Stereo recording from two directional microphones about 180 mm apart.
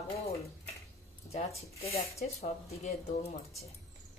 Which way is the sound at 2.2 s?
40° left (ahead or behind).